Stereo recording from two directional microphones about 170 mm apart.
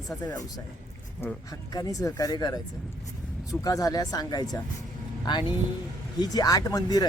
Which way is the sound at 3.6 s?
20° left (ahead or behind).